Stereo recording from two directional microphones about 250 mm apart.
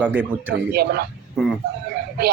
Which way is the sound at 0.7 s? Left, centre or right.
Right.